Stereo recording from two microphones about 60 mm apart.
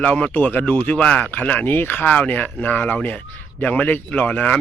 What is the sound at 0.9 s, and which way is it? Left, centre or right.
Speech, centre.